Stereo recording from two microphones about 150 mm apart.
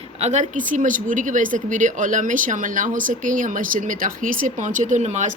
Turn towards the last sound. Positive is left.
turn(degrees=-50)  # may be behind; listen again after turning